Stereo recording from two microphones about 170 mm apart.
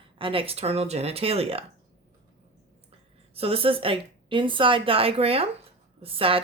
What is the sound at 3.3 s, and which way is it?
Speech, 35° right (ahead or behind).